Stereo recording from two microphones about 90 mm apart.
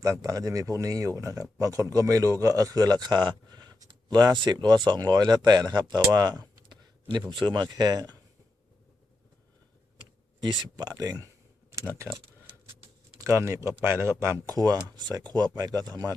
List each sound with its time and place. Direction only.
0.0 s speech: 40° right (ahead or behind)
5.9 s a sound: 45° right (ahead or behind)
7.3 s speech: 65° right (ahead or behind)
10.0 s speech: 60° right (ahead or behind); by 11.3 s 45° right (ahead or behind)
11.7 s speech: 30° right (ahead or behind)
13.1 s speech: 35° right (ahead or behind)